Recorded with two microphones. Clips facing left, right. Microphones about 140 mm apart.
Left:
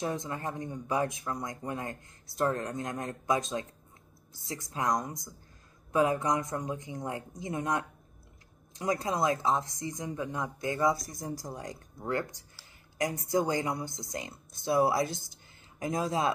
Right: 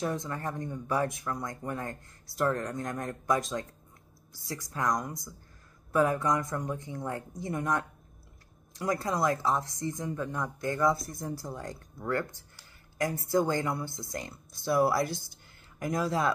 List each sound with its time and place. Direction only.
0.0 s speech: 20° left (ahead or behind)